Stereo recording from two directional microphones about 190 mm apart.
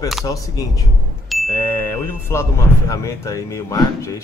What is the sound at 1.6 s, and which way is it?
Speech, 10° left (ahead or behind).